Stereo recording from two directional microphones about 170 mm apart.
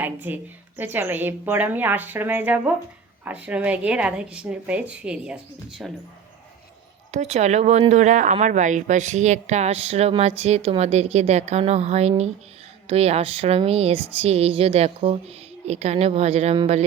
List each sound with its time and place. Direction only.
0.0 s a woman's voice: 10° right (ahead or behind)
7.1 s speech: 40° right (ahead or behind)